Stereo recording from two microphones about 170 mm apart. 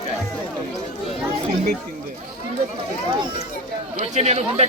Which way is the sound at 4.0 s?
40° right (ahead or behind).